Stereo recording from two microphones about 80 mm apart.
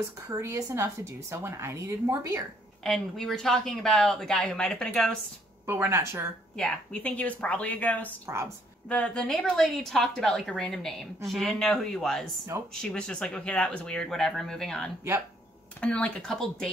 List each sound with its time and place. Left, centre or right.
0.3 s a woman's voice: right
2.8 s speech: centre
5.7 s a woman's voice: right
6.5 s speech: centre
12.5 s a woman's voice: right
12.8 s speech: centre